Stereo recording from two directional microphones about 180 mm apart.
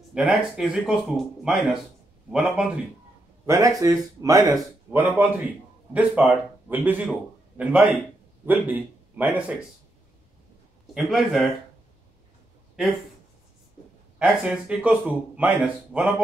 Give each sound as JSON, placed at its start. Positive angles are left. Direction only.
{"t": 0.1, "sound": "speech", "side_deg": -5}
{"t": 3.4, "sound": "a man's voice", "side_deg": -15}
{"t": 11.0, "sound": "speech", "side_deg": 0}
{"t": 14.1, "sound": "speech", "side_deg": -5}